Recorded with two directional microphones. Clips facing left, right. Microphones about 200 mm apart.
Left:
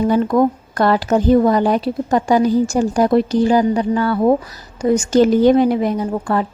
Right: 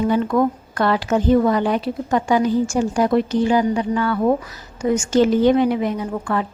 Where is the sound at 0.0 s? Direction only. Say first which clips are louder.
Left 3 dB; 35° left (ahead or behind).